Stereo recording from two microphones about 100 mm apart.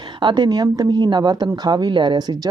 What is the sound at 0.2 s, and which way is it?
A woman's voice, 50° right (ahead or behind).